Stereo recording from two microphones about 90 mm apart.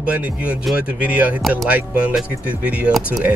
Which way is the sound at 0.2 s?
15° right (ahead or behind).